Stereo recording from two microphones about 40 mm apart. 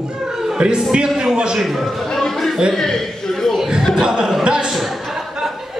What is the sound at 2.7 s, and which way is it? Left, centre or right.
Speech, centre.